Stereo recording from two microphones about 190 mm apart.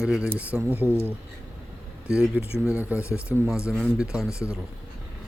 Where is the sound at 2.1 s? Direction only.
5° right (ahead or behind).